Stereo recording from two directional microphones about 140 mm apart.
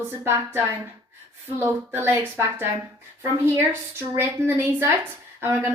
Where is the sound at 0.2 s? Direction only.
20° right (ahead or behind).